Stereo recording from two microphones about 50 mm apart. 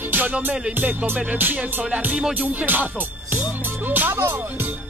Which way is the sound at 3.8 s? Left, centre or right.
Right.